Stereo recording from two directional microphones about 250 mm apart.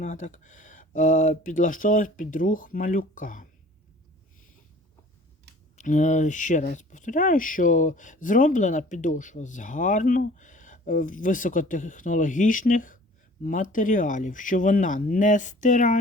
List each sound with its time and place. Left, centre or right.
0.0 s speech: left
5.7 s speech: left